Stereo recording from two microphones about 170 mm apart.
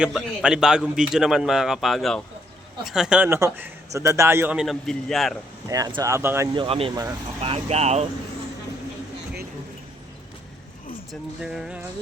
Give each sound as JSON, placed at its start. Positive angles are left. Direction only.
{"t": 0.0, "sound": "a man's voice", "side_deg": -5}
{"t": 5.6, "sound": "speech", "side_deg": -20}
{"t": 6.5, "sound": "speech", "side_deg": -30}
{"t": 11.1, "sound": "a man's voice", "side_deg": 0}